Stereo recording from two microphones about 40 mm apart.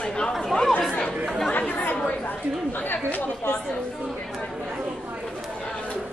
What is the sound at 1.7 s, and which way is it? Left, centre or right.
Speech, left.